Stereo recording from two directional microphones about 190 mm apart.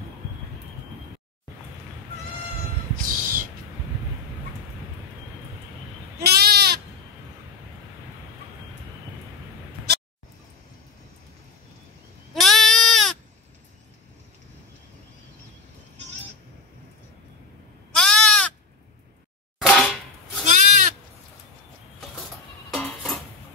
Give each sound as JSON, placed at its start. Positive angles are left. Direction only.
{"t": 3.1, "sound": "owl", "side_deg": -45}
{"t": 6.1, "sound": "goat", "side_deg": -55}
{"t": 12.4, "sound": "sheep", "side_deg": 0}
{"t": 17.9, "sound": "bleat", "side_deg": 5}
{"t": 19.6, "sound": "cap gun", "side_deg": 0}
{"t": 20.4, "sound": "goat", "side_deg": -40}
{"t": 22.7, "sound": "goat", "side_deg": 5}